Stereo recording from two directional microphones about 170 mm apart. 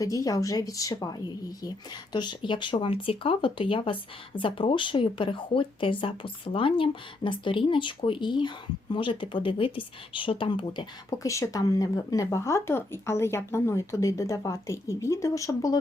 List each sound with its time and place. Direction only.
0.0 s speech: 20° left (ahead or behind)